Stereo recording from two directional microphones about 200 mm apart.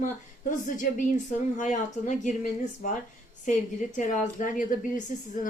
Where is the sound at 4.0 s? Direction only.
40° left (ahead or behind).